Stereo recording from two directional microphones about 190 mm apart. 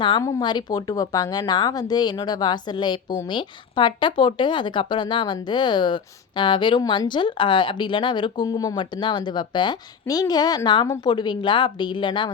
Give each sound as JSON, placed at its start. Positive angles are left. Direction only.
{"t": 0.0, "sound": "speech", "side_deg": 20}